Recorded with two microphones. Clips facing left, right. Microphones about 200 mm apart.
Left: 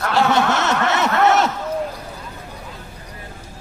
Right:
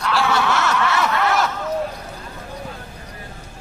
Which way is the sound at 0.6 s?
20° left (ahead or behind).